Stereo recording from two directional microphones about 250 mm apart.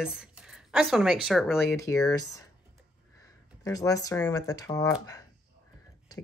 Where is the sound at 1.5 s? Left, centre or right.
Centre.